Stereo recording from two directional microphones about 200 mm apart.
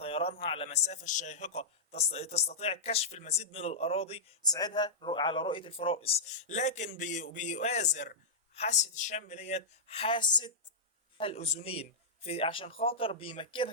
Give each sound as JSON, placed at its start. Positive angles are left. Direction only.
{"t": 0.0, "sound": "a sound", "side_deg": 30}
{"t": 0.4, "sound": "speech", "side_deg": 30}
{"t": 4.4, "sound": "a man's voice", "side_deg": 20}